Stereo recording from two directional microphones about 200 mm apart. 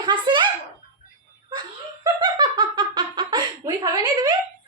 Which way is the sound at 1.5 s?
20° right (ahead or behind).